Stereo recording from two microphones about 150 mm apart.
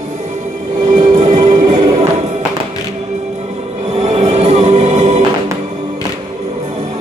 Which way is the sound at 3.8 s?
45° right (ahead or behind).